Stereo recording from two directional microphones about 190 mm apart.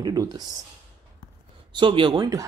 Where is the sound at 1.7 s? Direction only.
25° right (ahead or behind).